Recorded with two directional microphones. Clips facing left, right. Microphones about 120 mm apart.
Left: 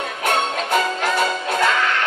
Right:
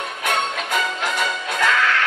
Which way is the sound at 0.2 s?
35° left (ahead or behind).